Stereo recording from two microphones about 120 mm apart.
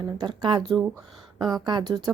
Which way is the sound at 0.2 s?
40° right (ahead or behind).